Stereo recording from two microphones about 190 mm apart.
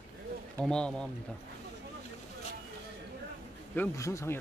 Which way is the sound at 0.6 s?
5° left (ahead or behind).